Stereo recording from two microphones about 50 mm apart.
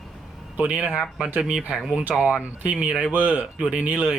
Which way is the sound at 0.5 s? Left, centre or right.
Right.